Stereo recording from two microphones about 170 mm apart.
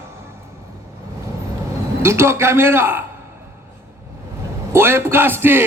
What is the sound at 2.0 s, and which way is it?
Music, 15° right (ahead or behind).